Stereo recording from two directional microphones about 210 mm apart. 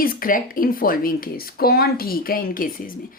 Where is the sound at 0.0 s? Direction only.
40° left (ahead or behind).